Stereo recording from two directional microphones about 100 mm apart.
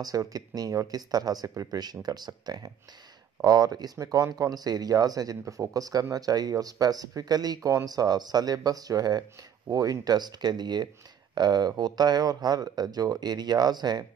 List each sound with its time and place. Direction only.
0.0 s speech: 35° right (ahead or behind)